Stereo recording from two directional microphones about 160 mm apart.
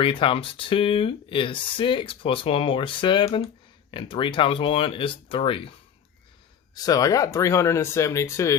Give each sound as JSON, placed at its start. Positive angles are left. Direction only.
{"t": 0.0, "sound": "speech", "side_deg": 35}
{"t": 6.7, "sound": "speech", "side_deg": 25}